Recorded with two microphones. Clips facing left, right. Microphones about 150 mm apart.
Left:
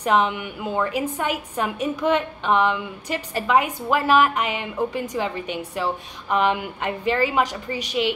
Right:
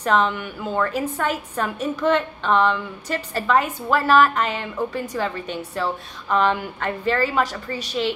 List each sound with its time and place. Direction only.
0.0 s a woman's voice: 15° left (ahead or behind)